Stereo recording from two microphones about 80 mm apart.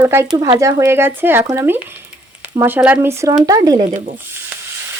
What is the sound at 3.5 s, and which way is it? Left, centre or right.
Speech, right.